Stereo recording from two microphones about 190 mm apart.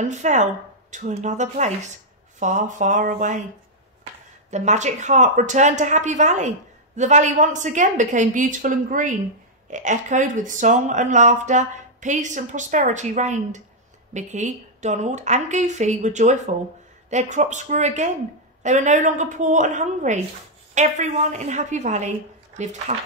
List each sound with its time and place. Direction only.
0.0 s speech: 40° right (ahead or behind)
4.5 s speech: 35° right (ahead or behind)